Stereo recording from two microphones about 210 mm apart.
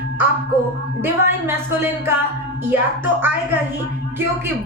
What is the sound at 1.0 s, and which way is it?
A woman's voice, 10° right (ahead or behind).